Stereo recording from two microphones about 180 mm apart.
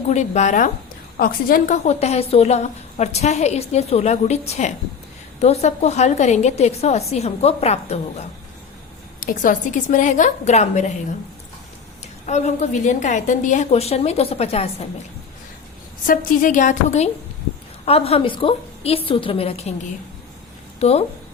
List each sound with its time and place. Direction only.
0.1 s a woman's voice: 40° left (ahead or behind)
1.1 s a woman's voice: 55° left (ahead or behind); by 8.0 s 35° left (ahead or behind)
9.2 s a woman's voice: 50° left (ahead or behind)
12.2 s a woman's voice: 40° left (ahead or behind)
16.0 s a woman's voice: 45° left (ahead or behind)
20.7 s speech: 35° left (ahead or behind)